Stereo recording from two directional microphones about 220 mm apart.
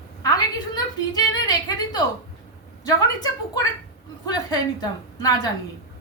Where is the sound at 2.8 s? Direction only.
15° left (ahead or behind).